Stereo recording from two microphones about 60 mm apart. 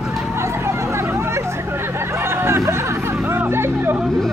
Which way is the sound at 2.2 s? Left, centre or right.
Right.